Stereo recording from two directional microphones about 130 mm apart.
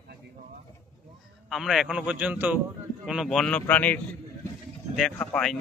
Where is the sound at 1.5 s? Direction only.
Centre (ahead or behind).